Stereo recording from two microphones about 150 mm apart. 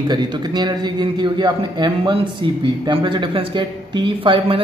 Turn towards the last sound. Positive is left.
turn(degrees=-35)  # may be behind; listen again after turning